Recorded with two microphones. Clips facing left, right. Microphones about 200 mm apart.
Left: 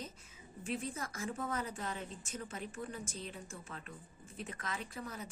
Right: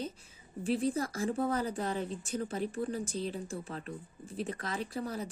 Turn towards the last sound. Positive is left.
turn(degrees=-35)  # may be behind; listen again after turning